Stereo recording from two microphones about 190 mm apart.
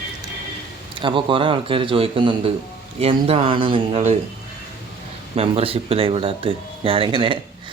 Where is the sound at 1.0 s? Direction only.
25° right (ahead or behind).